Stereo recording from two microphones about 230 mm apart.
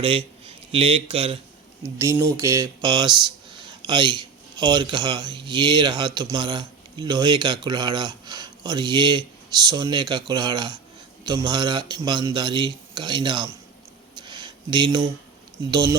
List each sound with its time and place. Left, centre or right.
0.0 s a man's voice: right
1.8 s speech: centre
14.2 s a sound: centre
15.7 s speech: centre